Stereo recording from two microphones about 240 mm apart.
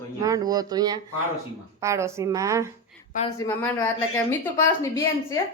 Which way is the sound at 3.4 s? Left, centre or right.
Centre.